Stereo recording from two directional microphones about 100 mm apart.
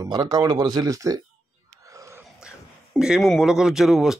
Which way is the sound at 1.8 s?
35° right (ahead or behind).